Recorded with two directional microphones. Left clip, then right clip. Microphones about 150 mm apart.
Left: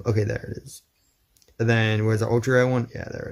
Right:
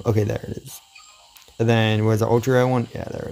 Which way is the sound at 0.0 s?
25° right (ahead or behind).